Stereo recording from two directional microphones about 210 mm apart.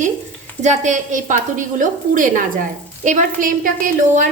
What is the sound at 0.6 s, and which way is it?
A woman's voice, 35° right (ahead or behind).